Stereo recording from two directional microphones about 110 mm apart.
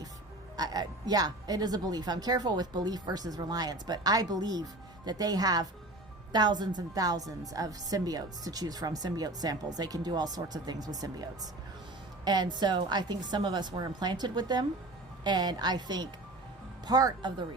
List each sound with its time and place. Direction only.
0.5 s a woman's voice: 40° right (ahead or behind)